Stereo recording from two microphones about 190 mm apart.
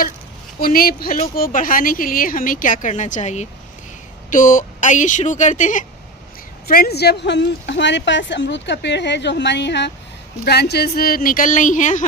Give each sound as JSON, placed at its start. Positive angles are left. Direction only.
{"t": 0.6, "sound": "a woman's voice", "side_deg": 50}
{"t": 6.7, "sound": "a woman's voice", "side_deg": 55}